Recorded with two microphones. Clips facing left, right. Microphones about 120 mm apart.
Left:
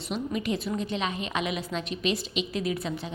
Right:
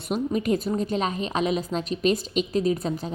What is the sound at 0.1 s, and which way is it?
A woman's voice, 45° right (ahead or behind).